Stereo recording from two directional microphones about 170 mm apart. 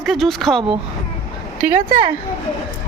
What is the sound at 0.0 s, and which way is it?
Speech, centre (ahead or behind).